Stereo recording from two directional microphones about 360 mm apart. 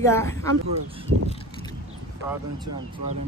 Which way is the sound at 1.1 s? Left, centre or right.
Right.